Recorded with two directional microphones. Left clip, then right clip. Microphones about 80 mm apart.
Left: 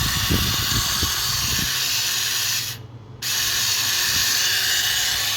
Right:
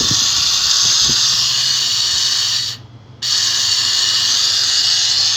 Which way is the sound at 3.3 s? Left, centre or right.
Centre.